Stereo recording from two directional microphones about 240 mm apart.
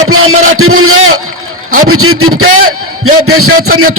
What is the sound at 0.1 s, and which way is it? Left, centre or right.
Music, right.